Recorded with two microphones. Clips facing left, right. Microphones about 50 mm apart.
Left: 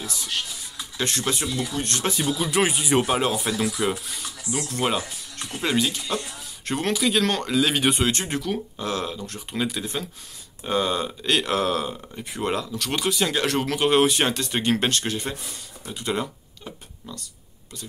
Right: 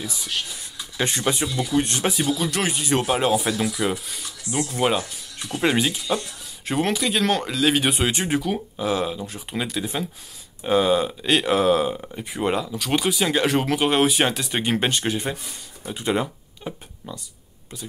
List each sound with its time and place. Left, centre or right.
0.0 s speech: centre
2.0 s speech: centre
5.5 s speech: centre
6.6 s speech: centre